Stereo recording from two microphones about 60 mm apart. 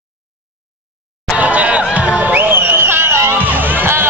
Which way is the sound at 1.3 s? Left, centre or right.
Right.